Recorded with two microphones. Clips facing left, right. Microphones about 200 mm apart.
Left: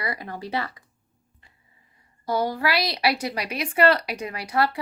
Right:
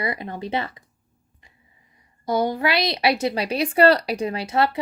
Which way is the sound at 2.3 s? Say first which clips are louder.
Right 3 dB; 20° right (ahead or behind).